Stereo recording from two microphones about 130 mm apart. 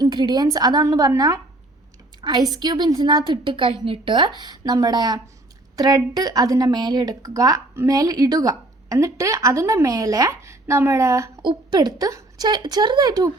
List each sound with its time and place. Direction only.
0.0 s speech: 35° right (ahead or behind)
2.5 s a woman's voice: 35° right (ahead or behind)